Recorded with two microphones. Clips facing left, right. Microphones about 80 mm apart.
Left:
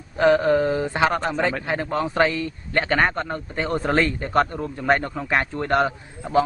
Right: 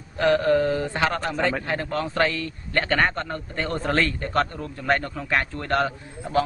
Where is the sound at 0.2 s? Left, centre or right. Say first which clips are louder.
Left 2 dB; centre.